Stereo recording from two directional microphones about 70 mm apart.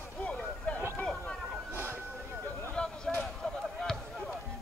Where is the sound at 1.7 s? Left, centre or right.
Right.